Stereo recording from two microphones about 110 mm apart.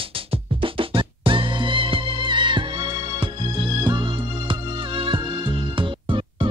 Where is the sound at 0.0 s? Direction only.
55° right (ahead or behind).